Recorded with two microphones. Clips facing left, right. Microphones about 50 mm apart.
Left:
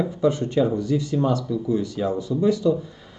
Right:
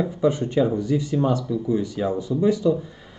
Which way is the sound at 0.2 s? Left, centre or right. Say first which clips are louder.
Even; centre.